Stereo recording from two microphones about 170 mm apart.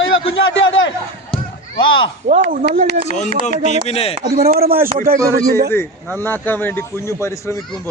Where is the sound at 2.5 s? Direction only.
55° right (ahead or behind).